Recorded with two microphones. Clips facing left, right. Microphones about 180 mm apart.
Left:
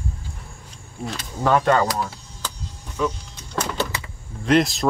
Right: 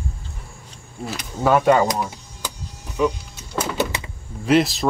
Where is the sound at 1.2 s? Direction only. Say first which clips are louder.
Right 2 dB; 10° right (ahead or behind).